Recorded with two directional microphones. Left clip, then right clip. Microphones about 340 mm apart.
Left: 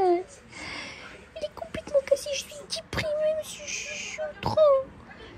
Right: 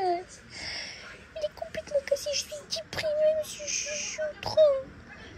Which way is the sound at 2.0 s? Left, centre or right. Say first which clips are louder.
Left 3 dB; centre.